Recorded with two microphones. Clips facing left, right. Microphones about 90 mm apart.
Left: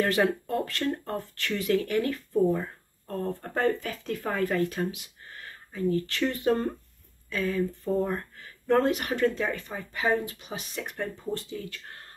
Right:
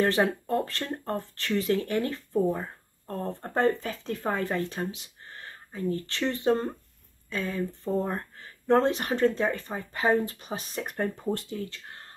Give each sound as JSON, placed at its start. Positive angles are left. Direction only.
{"t": 0.0, "sound": "speech", "side_deg": -30}